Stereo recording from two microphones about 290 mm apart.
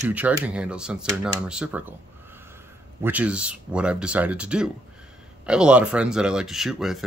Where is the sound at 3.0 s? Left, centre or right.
Centre.